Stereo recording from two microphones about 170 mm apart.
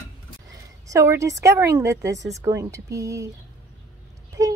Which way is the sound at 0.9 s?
20° right (ahead or behind).